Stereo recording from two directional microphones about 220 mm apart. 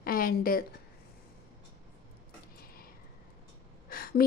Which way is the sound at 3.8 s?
40° left (ahead or behind).